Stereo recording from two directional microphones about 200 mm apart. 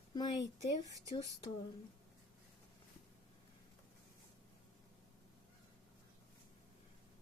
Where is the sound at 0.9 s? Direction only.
15° right (ahead or behind).